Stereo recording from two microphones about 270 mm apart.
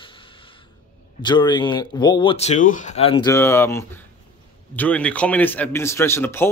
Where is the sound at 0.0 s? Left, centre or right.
Centre.